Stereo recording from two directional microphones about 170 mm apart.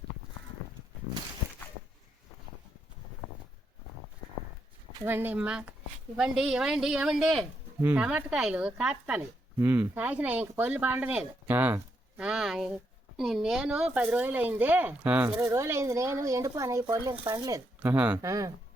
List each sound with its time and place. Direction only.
5.0 s speech: 10° right (ahead or behind)
17.7 s speech: 10° right (ahead or behind)